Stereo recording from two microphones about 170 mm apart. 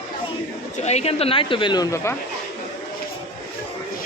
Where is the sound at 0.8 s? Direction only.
40° left (ahead or behind); by 2.1 s 15° left (ahead or behind).